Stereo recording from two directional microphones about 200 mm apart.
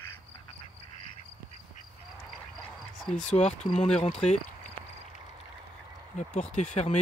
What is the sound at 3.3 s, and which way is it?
Speech, 30° left (ahead or behind).